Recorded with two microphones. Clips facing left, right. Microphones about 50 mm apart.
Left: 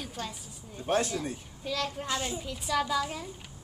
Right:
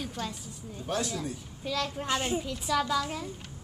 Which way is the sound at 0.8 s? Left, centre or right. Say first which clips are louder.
Left 4 dB; left.